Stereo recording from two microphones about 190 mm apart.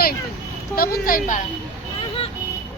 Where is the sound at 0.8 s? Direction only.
50° left (ahead or behind).